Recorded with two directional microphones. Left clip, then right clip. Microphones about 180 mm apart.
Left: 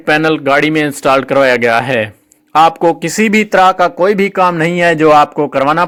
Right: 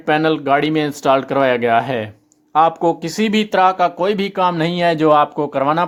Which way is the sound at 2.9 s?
15° left (ahead or behind).